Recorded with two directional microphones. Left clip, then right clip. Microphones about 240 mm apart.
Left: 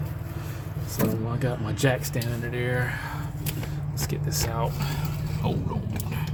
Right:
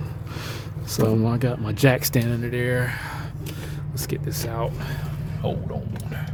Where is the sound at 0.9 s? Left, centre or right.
Right.